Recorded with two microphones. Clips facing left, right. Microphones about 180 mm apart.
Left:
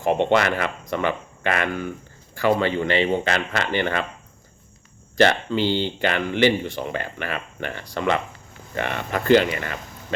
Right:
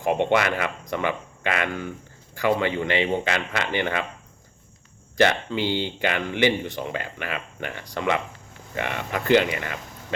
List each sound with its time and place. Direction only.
0.0 s speech: 15° right (ahead or behind)
5.1 s speech: 15° right (ahead or behind)